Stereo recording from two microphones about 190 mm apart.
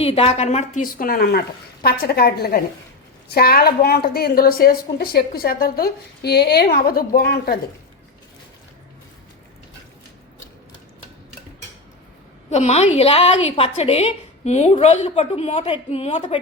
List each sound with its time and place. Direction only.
0.0 s a woman's voice: 30° left (ahead or behind); by 7.6 s 55° left (ahead or behind)
12.5 s a woman's voice: 35° left (ahead or behind)